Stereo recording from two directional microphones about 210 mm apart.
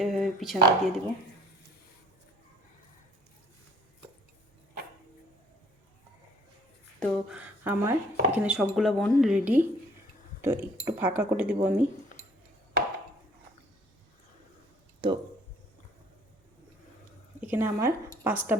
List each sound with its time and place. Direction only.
0.0 s speech: centre (ahead or behind)
7.0 s speech: 5° right (ahead or behind)
15.0 s speech: 25° right (ahead or behind)
17.4 s speech: 10° right (ahead or behind)